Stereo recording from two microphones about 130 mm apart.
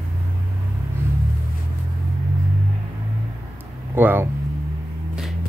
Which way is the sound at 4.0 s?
15° right (ahead or behind).